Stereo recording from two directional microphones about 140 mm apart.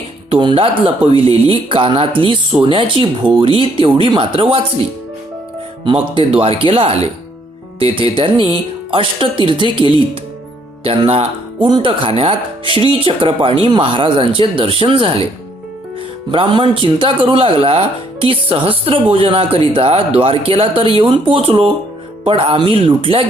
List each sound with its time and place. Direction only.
0.3 s speech: 35° right (ahead or behind)
5.8 s speech: 40° right (ahead or behind)
16.3 s speech: 40° right (ahead or behind)